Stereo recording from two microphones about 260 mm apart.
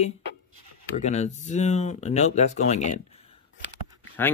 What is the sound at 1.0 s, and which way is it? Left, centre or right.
Speech, left.